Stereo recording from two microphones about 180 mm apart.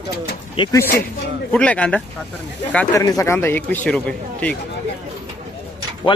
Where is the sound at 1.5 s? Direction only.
5° left (ahead or behind).